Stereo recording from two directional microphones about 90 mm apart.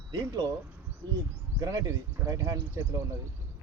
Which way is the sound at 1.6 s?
40° right (ahead or behind).